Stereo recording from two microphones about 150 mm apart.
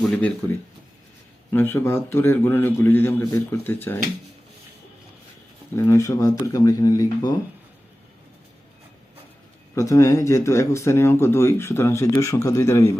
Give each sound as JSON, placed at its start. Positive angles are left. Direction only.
{"t": 0.0, "sound": "a man's voice", "side_deg": 5}
{"t": 1.5, "sound": "a man's voice", "side_deg": 15}
{"t": 5.7, "sound": "speech", "side_deg": 15}
{"t": 9.7, "sound": "a man's voice", "side_deg": 20}